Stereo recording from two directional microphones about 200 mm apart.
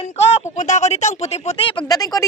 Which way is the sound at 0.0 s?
30° left (ahead or behind).